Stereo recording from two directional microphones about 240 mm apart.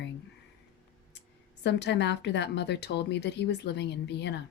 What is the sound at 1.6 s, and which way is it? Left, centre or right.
Speech, left.